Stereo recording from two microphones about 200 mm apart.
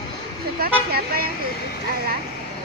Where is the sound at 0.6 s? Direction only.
50° right (ahead or behind).